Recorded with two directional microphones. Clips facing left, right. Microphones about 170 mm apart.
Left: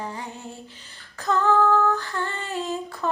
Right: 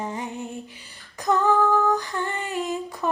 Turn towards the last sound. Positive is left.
turn(degrees=-15)  # may be behind; listen again after turning